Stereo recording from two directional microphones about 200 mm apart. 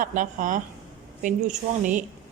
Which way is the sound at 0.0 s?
40° right (ahead or behind).